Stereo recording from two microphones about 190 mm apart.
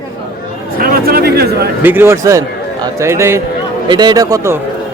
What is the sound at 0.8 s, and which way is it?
Speech, 50° right (ahead or behind).